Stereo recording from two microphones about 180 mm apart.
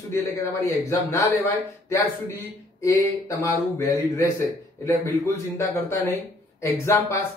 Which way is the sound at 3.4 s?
15° left (ahead or behind).